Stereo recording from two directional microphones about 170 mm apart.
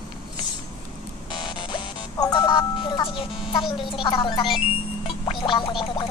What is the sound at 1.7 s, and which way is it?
Music, 20° left (ahead or behind).